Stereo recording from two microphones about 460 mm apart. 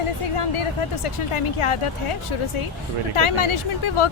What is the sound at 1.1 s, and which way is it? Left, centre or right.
Speech, left.